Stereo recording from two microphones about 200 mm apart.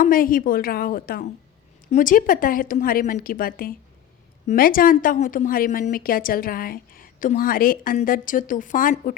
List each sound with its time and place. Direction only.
0.0 s a woman's voice: 45° left (ahead or behind)